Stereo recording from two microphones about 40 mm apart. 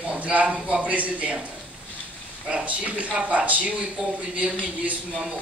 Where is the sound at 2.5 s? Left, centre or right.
Right.